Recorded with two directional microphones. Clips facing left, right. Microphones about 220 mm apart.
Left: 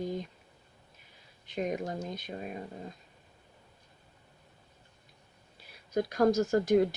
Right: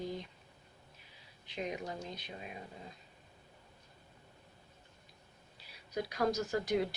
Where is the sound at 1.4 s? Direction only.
45° left (ahead or behind).